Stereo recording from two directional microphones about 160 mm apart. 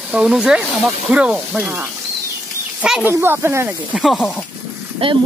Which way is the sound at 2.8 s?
5° right (ahead or behind).